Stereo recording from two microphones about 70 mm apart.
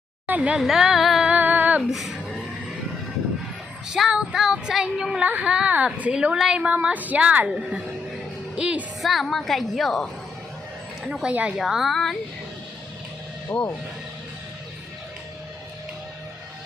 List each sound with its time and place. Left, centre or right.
0.3 s speech: centre
0.6 s speech: centre
1.3 s female singing: right
1.9 s a woman's voice: centre
3.8 s child singing: centre
4.1 s female singing: centre
5.2 s a woman's voice: right
5.5 s female singing: centre
6.8 s a woman's voice: right
9.0 s a woman's voice: centre
11.1 s female singing: centre
11.5 s a woman's voice: centre
13.5 s speech: left